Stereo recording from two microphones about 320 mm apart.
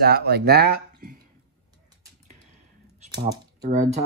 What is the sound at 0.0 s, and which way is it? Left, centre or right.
Speech, right.